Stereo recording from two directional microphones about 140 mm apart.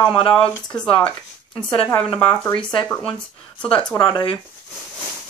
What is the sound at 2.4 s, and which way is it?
Speech, 5° left (ahead or behind).